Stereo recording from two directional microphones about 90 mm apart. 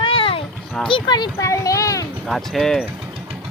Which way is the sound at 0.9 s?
60° left (ahead or behind).